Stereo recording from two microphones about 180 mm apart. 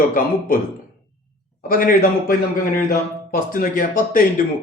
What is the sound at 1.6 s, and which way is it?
Speech, 50° left (ahead or behind).